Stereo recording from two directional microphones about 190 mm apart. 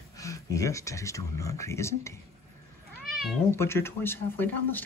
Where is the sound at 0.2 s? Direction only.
15° left (ahead or behind).